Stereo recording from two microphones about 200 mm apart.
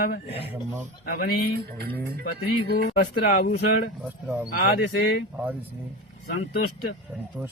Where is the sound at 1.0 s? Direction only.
50° left (ahead or behind).